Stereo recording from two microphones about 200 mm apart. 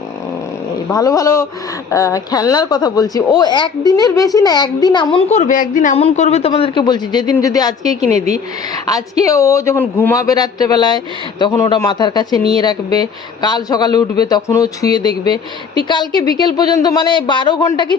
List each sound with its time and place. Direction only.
0.9 s a woman's voice: 15° left (ahead or behind)